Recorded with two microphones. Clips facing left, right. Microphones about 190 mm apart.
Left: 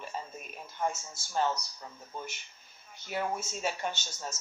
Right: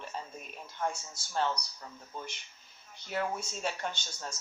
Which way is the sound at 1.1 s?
20° left (ahead or behind).